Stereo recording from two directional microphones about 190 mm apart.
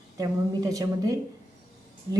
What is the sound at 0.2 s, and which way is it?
A woman's voice, 20° right (ahead or behind).